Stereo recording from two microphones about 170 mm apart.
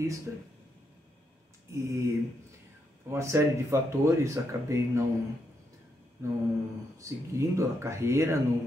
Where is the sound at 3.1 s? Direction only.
15° right (ahead or behind).